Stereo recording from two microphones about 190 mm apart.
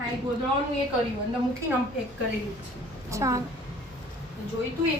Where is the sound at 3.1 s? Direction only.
15° right (ahead or behind).